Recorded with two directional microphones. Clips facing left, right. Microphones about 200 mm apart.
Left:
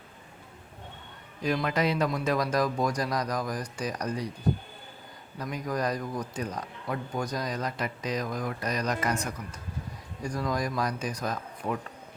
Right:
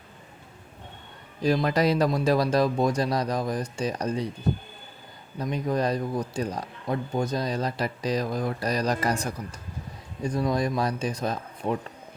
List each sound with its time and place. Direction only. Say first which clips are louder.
1.4 s a man's voice: right 4 dB; 35° right (ahead or behind)
5.4 s a man's voice: right 5 dB; 25° right (ahead or behind)